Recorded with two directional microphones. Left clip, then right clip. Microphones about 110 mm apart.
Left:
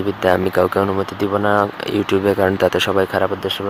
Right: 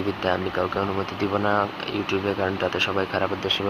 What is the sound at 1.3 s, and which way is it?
Speech, 25° left (ahead or behind).